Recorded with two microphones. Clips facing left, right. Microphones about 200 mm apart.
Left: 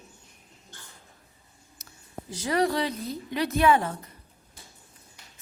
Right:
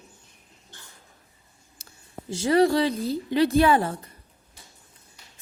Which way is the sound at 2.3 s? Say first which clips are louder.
Right 6 dB; 30° right (ahead or behind).